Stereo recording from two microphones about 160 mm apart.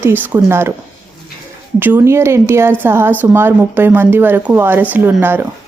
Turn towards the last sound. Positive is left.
turn(degrees=-10)  # may be behind; listen again after turning